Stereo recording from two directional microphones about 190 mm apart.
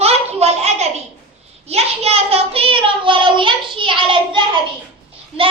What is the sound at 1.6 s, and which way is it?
Child singing, 35° right (ahead or behind).